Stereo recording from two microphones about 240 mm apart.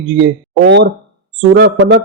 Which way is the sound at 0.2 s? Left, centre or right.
Right.